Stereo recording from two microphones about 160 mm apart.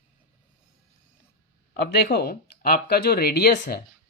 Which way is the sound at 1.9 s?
85° left.